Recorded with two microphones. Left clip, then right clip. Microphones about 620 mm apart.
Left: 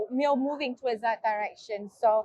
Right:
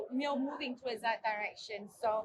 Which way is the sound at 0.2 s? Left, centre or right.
Left.